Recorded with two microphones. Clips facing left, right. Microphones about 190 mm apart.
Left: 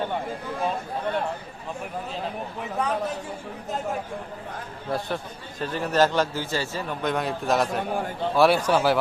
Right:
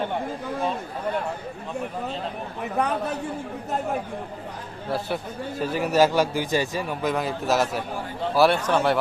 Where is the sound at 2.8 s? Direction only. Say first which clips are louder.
Right 1 dB; 60° right (ahead or behind).